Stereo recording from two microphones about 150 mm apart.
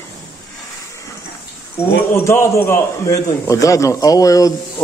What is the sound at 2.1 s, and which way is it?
A man's voice, 15° left (ahead or behind).